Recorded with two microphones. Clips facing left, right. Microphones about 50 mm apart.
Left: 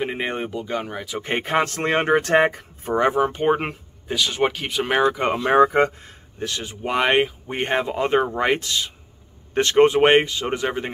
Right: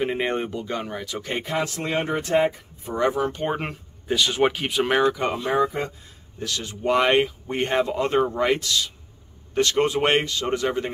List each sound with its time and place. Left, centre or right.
0.0 s speech: centre
1.2 s speech: left
3.0 s speech: left
4.1 s speech: centre
5.0 s speech: left
5.4 s speech: left
6.4 s speech: left